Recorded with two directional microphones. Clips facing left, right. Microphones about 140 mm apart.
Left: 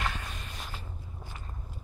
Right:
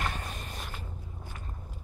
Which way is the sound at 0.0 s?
40° right (ahead or behind).